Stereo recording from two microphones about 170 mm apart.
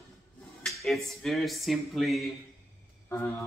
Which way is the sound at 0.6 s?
Centre (ahead or behind).